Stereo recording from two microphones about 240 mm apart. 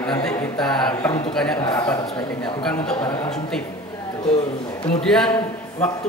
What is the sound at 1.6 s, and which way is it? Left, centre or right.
Speech, centre.